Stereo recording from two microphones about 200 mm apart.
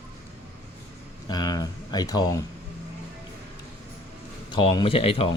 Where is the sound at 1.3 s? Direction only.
20° left (ahead or behind).